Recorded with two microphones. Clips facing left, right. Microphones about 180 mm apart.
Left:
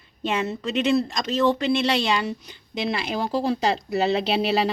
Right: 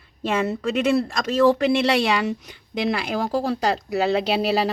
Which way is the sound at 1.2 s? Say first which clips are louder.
Right 4 dB; 10° right (ahead or behind).